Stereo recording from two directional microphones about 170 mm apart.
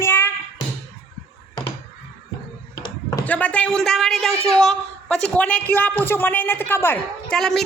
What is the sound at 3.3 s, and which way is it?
Speech, 10° left (ahead or behind).